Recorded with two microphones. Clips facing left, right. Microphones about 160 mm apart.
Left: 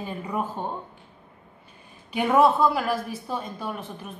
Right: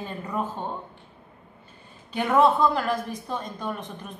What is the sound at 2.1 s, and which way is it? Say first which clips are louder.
A woman's voice: left 1 dB; 10° left (ahead or behind).